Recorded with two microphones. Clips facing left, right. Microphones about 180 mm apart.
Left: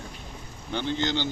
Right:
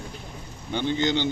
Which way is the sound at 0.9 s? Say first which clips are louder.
Right 4 dB; 15° right (ahead or behind).